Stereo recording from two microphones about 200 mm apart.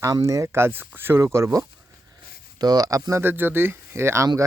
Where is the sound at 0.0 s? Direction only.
15° right (ahead or behind).